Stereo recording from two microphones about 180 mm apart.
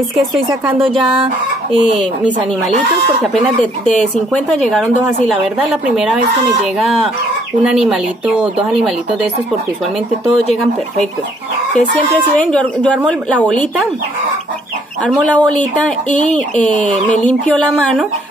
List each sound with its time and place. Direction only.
1.1 s speech: 30° right (ahead or behind)
3.8 s speech: centre (ahead or behind)
7.6 s speech: 5° right (ahead or behind)
10.2 s speech: centre (ahead or behind)
12.4 s a woman's voice: 5° left (ahead or behind)
15.3 s a woman's voice: 5° left (ahead or behind)